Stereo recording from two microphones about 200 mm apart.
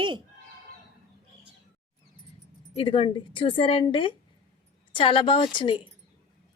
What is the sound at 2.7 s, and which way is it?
A woman's voice, 25° left (ahead or behind).